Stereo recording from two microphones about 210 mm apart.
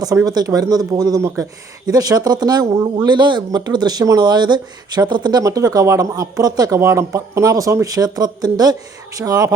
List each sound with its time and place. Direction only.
0.0 s speech: 15° right (ahead or behind)